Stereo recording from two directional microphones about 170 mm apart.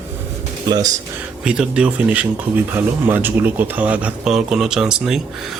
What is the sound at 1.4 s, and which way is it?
Speech, 5° right (ahead or behind).